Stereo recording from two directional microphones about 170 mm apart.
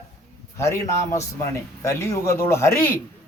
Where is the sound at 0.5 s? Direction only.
15° left (ahead or behind).